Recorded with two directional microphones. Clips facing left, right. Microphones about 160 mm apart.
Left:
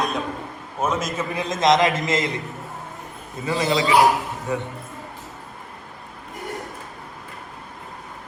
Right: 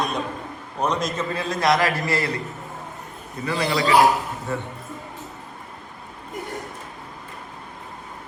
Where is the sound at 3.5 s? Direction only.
20° left (ahead or behind).